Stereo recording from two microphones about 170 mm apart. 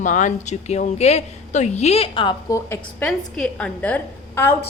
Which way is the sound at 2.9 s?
5° left (ahead or behind).